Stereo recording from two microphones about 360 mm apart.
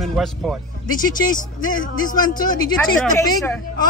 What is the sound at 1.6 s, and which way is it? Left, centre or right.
Speech, left.